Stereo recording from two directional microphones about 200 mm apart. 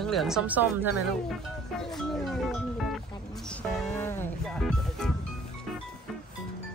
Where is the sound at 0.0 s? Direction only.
Centre (ahead or behind).